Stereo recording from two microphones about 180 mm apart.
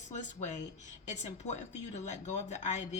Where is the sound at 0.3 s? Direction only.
40° left (ahead or behind).